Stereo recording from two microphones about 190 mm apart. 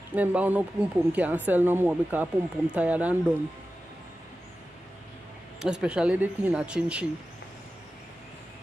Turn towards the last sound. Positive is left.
turn(degrees=-5)  # may be behind; listen again after turning